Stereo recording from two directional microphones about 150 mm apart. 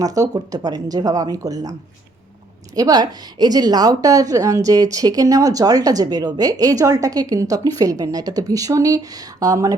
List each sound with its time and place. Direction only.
0.0 s a woman's voice: 25° right (ahead or behind)
2.7 s a woman's voice: 25° right (ahead or behind)